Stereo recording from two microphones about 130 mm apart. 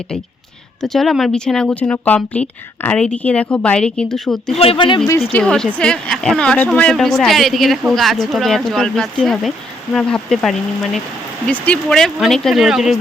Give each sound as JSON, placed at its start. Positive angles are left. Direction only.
{"t": 0.8, "sound": "speech", "side_deg": 0}
{"t": 4.5, "sound": "speech", "side_deg": 45}
{"t": 5.3, "sound": "a woman's voice", "side_deg": 5}